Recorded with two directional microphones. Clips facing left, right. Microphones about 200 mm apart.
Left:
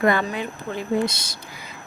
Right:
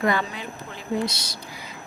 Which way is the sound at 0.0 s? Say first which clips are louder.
Left 4 dB; 55° left (ahead or behind).